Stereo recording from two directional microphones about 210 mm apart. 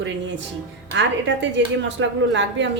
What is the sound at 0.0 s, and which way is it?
A woman's voice, 60° right (ahead or behind).